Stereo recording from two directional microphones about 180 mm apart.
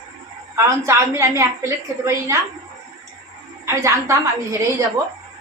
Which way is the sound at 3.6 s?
15° right (ahead or behind).